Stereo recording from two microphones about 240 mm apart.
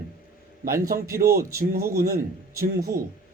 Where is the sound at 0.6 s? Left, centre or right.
Right.